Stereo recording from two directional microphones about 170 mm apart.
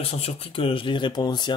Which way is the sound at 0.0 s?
35° left (ahead or behind).